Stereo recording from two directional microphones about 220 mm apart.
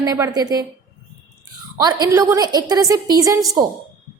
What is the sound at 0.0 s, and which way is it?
Speech, 15° right (ahead or behind).